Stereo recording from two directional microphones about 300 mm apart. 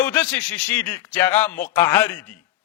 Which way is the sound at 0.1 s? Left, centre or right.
Centre.